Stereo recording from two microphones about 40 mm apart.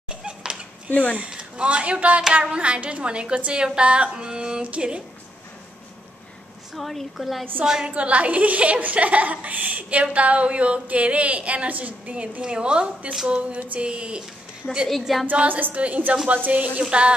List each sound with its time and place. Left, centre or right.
0.1 s a sound: right
0.8 s speech: left
1.3 s a man's voice: right
2.4 s female singing: right
6.7 s a woman's voice: centre
7.8 s a woman's voice: right
13.7 s female singing: right
14.9 s a woman's voice: centre
15.4 s a woman's voice: right
16.8 s female singing: right